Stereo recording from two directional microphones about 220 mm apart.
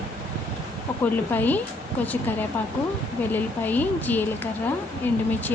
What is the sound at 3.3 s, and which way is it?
Speech, 10° left (ahead or behind).